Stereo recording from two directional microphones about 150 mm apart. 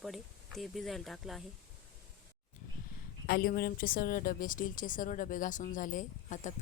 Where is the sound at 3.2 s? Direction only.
75° left (ahead or behind).